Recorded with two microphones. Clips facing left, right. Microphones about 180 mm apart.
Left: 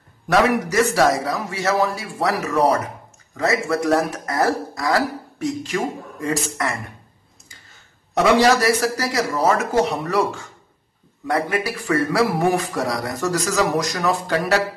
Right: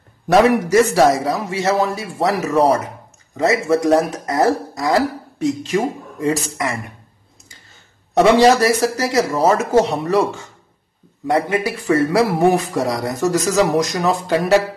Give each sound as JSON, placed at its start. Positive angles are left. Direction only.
{"t": 0.3, "sound": "a man's voice", "side_deg": -25}
{"t": 8.2, "sound": "a man's voice", "side_deg": -25}
{"t": 11.2, "sound": "a man's voice", "side_deg": -20}